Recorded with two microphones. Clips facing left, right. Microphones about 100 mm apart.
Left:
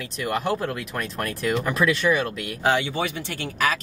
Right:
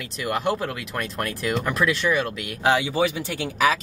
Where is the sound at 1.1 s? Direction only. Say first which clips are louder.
Left 1 dB; centre (ahead or behind).